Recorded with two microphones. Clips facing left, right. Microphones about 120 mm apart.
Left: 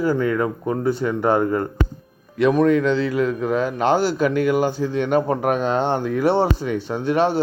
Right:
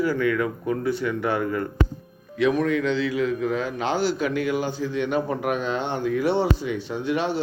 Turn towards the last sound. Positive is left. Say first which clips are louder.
# left 5 dB
turn(degrees=45)  # may be behind; listen again after turning